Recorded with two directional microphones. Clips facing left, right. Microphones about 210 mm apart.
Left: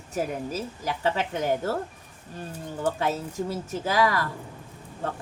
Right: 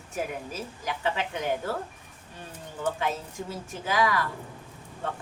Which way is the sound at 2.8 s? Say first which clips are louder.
Left 3 dB; 40° left (ahead or behind).